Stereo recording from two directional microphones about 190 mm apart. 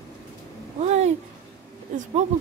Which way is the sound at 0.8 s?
35° right (ahead or behind).